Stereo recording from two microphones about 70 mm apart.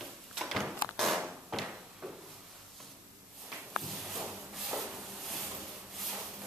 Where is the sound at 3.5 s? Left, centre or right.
Centre.